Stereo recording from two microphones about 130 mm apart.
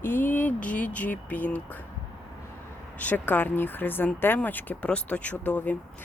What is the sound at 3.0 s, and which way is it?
Speech, 10° left (ahead or behind).